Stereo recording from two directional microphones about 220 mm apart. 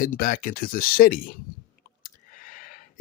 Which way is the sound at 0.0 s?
40° left (ahead or behind).